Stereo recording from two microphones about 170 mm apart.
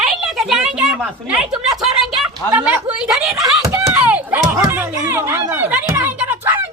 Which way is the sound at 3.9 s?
10° right (ahead or behind).